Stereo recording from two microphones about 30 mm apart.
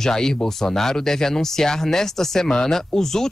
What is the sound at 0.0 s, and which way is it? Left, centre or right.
Speech, centre.